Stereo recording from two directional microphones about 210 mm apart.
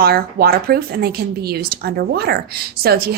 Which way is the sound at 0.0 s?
45° right (ahead or behind).